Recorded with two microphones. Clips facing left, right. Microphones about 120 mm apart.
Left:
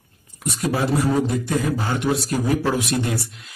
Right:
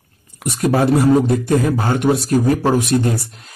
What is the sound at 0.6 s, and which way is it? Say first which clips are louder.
Speech: right 7 dB; 55° right (ahead or behind).